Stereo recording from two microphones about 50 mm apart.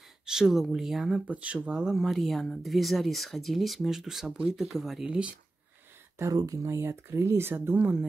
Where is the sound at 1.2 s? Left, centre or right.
Right.